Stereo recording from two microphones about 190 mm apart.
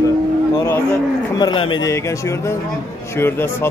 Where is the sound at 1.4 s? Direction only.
25° left (ahead or behind).